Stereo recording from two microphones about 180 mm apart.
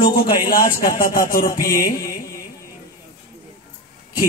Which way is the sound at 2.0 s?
20° left (ahead or behind).